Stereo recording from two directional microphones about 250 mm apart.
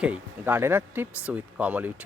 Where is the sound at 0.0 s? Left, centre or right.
Centre.